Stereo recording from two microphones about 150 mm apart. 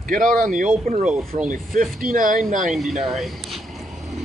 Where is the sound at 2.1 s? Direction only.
65° right (ahead or behind).